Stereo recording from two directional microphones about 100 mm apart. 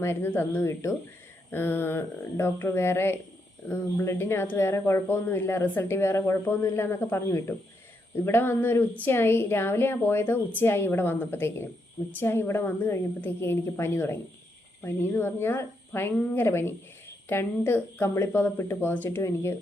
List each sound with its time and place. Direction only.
0.0 s speech: 25° left (ahead or behind)